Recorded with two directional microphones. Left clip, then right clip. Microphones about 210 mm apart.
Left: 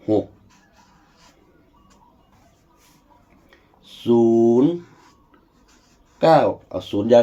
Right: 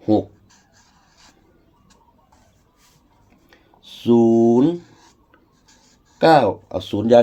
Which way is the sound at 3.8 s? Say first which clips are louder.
Right 1 dB; 55° right (ahead or behind).